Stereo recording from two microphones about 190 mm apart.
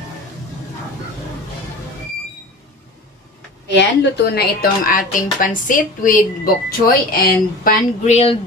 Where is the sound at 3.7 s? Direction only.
65° left (ahead or behind); by 8.4 s 35° left (ahead or behind).